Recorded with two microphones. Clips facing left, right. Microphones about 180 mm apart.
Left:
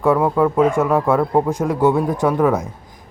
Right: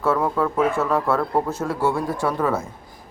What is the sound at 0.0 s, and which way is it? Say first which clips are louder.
Speech: left 5 dB; 15° left (ahead or behind).